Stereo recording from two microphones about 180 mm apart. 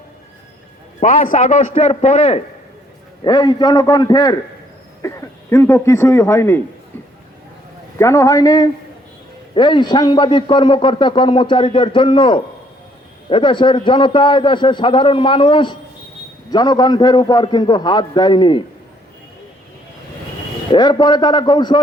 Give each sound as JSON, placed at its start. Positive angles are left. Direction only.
{"t": 0.9, "sound": "a man's voice", "side_deg": 45}
{"t": 3.2, "sound": "a man's voice", "side_deg": 25}
{"t": 7.9, "sound": "a man's voice", "side_deg": 15}
{"t": 20.7, "sound": "a man's voice", "side_deg": 25}